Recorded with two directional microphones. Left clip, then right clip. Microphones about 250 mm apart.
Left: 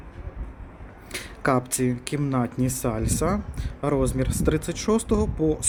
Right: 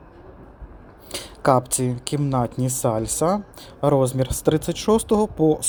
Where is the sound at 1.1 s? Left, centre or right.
Centre.